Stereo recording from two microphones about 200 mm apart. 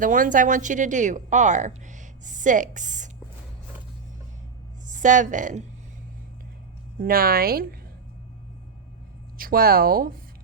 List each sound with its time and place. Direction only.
0.0 s a woman's voice: 40° right (ahead or behind)
4.9 s a woman's voice: 40° right (ahead or behind)
7.0 s speech: 50° right (ahead or behind)
9.4 s speech: 45° right (ahead or behind)